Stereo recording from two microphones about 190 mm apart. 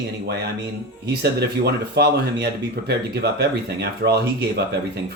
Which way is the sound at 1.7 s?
60° right (ahead or behind).